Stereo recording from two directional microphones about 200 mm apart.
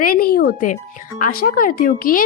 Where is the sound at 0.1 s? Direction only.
50° left (ahead or behind).